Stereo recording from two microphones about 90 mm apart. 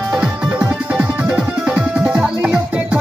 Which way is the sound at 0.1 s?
5° right (ahead or behind).